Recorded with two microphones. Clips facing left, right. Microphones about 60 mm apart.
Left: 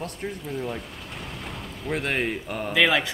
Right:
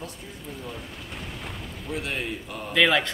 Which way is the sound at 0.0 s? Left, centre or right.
Left.